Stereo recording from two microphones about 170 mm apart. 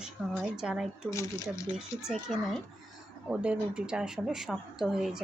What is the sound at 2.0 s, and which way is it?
A woman's voice, centre (ahead or behind).